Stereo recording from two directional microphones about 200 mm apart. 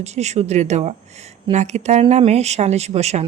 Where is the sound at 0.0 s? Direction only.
35° right (ahead or behind).